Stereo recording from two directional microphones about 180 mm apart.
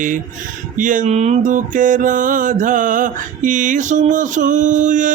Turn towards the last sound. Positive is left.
turn(degrees=-45)  # may be behind; listen again after turning